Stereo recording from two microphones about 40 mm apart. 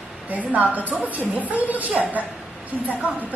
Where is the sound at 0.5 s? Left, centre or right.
Right.